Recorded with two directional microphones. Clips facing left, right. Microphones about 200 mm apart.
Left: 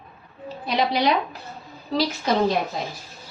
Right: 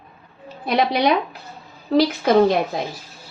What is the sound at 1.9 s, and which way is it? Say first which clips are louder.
Speech: right 7 dB; 55° right (ahead or behind).